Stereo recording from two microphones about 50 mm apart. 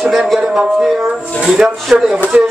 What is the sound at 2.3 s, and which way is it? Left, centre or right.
Speech, right.